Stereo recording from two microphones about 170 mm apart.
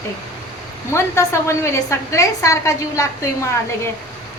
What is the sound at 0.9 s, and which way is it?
A woman's voice, 15° left (ahead or behind).